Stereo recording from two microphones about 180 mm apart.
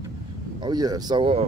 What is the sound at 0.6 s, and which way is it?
Speech, 25° right (ahead or behind).